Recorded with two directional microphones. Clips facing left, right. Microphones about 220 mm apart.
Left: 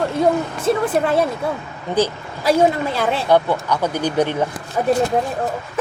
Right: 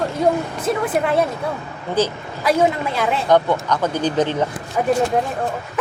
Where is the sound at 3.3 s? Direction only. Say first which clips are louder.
Right 1 dB; 10° left (ahead or behind).